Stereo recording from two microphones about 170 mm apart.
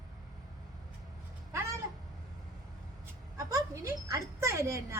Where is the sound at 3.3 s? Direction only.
20° right (ahead or behind).